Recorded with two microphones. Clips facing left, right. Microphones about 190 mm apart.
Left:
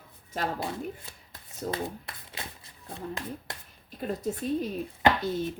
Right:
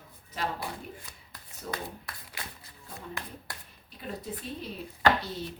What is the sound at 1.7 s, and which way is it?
Speech, 25° left (ahead or behind).